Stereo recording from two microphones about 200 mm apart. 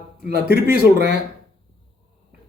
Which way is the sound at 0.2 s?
55° right (ahead or behind).